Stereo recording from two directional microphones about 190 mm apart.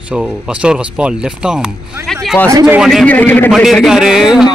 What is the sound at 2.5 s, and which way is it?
Speech, 15° right (ahead or behind).